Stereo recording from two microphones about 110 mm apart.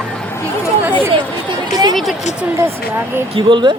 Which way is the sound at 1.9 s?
Centre (ahead or behind).